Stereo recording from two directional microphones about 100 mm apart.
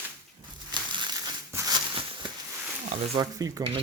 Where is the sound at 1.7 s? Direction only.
50° right (ahead or behind).